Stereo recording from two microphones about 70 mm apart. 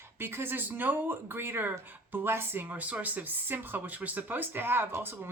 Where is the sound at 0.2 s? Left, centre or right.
Right.